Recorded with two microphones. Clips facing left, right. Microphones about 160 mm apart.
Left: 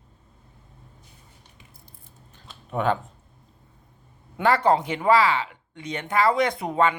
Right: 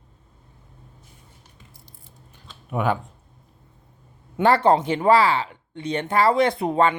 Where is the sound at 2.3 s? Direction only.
10° right (ahead or behind).